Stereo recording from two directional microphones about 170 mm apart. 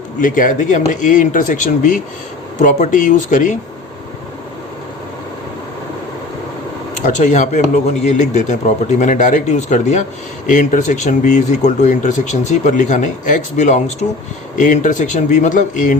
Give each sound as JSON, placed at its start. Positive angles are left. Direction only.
{"t": 0.2, "sound": "speech", "side_deg": 50}
{"t": 7.0, "sound": "speech", "side_deg": 45}